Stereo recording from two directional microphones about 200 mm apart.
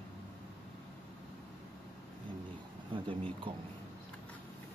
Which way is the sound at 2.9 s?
25° right (ahead or behind).